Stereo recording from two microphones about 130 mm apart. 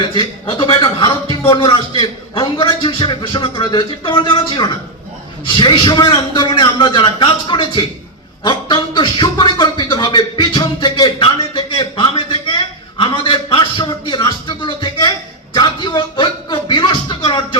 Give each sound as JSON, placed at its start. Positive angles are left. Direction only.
{"t": 0.5, "sound": "a man's voice", "side_deg": 40}
{"t": 8.4, "sound": "music", "side_deg": 35}